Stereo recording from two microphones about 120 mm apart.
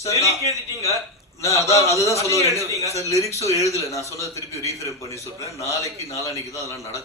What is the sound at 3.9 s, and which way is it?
Speech, 25° left (ahead or behind).